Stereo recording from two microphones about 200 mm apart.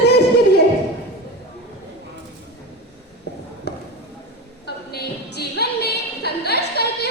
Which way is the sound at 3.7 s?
55° left (ahead or behind).